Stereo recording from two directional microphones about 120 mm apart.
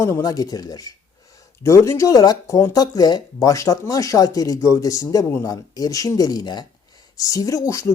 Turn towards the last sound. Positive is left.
turn(degrees=25)  # may be behind; listen again after turning